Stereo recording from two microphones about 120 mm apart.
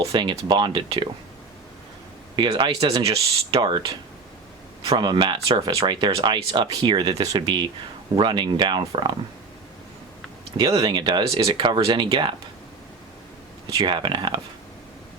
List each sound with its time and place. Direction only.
0.0 s speech: 45° right (ahead or behind)
2.5 s speech: 45° right (ahead or behind)
3.6 s speech: 40° right (ahead or behind)
10.8 s speech: 35° right (ahead or behind)
13.7 s speech: 40° right (ahead or behind)